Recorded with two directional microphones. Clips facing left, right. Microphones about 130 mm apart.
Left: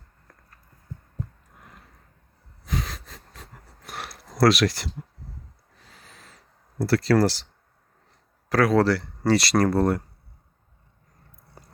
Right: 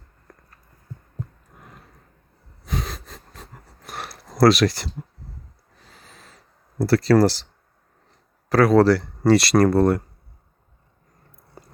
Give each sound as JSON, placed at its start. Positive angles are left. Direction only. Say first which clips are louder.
{"t": 2.6, "sound": "wheeze", "louder": "right 1 dB", "side_deg": -25}
{"t": 3.8, "sound": "a sound", "louder": "right 2 dB", "side_deg": -40}
{"t": 6.7, "sound": "speech", "louder": "right 4 dB", "side_deg": -40}
{"t": 8.4, "sound": "speech", "louder": "right 5 dB", "side_deg": -35}